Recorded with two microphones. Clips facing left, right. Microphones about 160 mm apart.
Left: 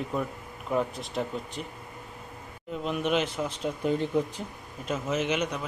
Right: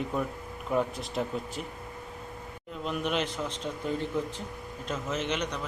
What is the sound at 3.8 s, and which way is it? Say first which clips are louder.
Speech: left 5 dB; 20° left (ahead or behind).